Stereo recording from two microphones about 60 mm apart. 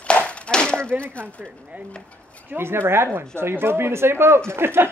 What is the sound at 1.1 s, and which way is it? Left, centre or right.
Speech, left.